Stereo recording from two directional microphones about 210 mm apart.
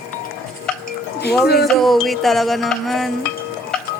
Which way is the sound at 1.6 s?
Centre (ahead or behind).